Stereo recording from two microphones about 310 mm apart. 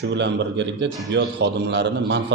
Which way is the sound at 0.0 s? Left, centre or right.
Right.